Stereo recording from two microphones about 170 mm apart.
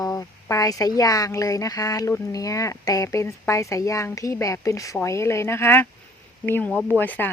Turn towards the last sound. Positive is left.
turn(degrees=10)  # may be behind; listen again after turning